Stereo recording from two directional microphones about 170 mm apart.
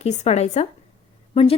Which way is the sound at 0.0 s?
40° left (ahead or behind).